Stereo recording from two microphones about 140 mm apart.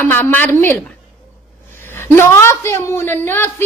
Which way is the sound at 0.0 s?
10° left (ahead or behind).